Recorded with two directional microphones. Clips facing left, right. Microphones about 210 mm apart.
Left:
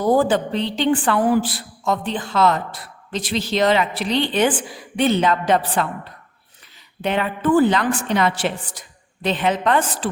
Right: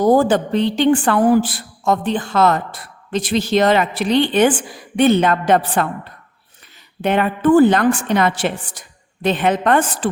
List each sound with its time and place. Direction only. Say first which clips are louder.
0.0 s a woman's voice: right 3 dB; 45° right (ahead or behind)
7.0 s a woman's voice: right 5 dB; 50° right (ahead or behind)